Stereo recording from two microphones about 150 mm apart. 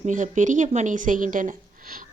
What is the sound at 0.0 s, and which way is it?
A woman's voice, 55° right (ahead or behind).